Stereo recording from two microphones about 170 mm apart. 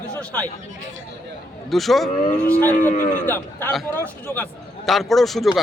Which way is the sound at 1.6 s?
Centre (ahead or behind).